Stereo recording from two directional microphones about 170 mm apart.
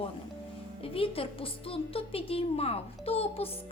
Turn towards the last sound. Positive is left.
turn(degrees=35)  # may be behind; listen again after turning